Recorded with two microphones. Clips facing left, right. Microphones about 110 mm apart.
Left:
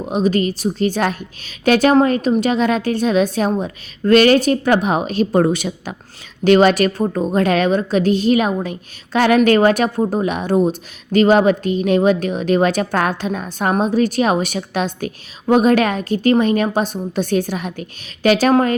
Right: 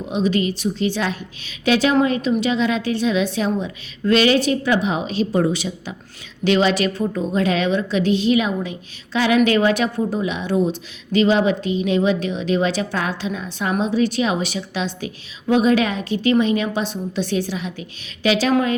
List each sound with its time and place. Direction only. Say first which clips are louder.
0.0 s a woman's voice: left 3 dB; 45° left (ahead or behind)